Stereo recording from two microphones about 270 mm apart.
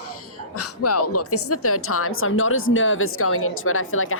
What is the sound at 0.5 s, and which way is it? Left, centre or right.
A woman's voice, left.